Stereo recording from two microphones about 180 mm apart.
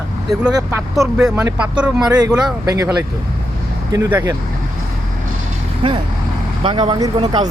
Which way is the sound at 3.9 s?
20° right (ahead or behind).